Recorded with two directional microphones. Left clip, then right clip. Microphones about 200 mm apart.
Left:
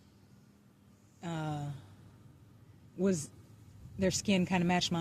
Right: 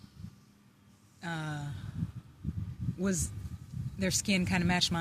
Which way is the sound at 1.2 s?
25° right (ahead or behind).